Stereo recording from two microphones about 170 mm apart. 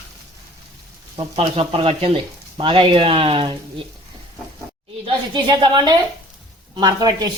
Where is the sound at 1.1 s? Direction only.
30° right (ahead or behind).